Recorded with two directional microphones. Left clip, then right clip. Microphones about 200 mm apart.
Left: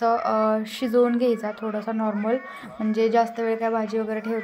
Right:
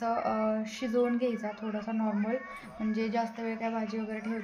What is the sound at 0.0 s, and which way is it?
Speech, 30° left (ahead or behind).